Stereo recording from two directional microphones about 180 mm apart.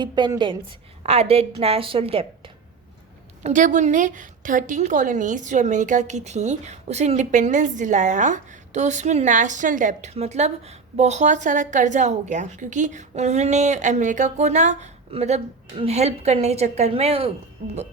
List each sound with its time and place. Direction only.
0.0 s a woman's voice: 25° right (ahead or behind)
3.4 s a woman's voice: 45° right (ahead or behind)